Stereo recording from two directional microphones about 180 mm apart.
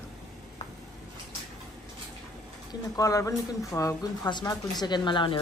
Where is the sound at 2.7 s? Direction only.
20° left (ahead or behind).